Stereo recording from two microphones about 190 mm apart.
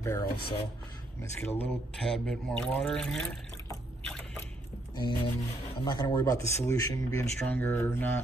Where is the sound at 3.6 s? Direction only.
10° left (ahead or behind).